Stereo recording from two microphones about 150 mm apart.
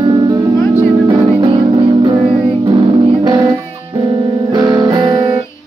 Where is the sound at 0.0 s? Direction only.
30° right (ahead or behind).